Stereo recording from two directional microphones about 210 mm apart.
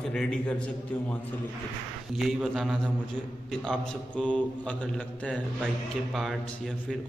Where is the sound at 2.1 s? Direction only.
Centre (ahead or behind).